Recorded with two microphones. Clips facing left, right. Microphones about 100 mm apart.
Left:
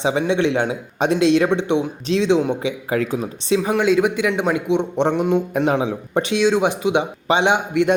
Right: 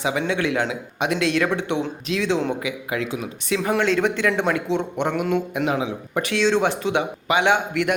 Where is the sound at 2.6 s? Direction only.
35° left (ahead or behind).